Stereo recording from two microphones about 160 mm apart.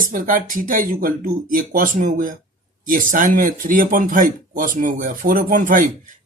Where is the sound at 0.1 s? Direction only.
55° right (ahead or behind).